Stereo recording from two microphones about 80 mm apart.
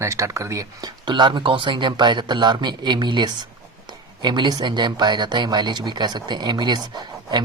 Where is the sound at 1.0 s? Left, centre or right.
Right.